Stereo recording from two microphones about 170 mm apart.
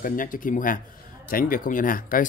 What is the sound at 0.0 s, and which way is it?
Speech, 55° left (ahead or behind).